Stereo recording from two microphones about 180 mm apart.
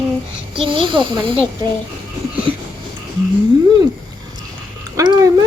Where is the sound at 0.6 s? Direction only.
30° right (ahead or behind).